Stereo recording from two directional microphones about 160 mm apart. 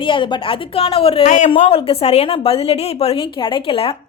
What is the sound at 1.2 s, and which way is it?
Speech, 50° left (ahead or behind).